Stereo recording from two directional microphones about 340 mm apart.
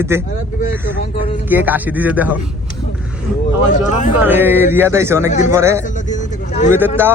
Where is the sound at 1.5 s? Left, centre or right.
Centre.